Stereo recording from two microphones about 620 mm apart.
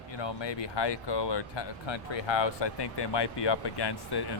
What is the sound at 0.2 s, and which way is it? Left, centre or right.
Speech, left.